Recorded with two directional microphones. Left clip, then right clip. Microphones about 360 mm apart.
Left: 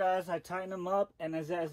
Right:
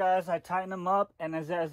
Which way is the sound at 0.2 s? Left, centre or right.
Centre.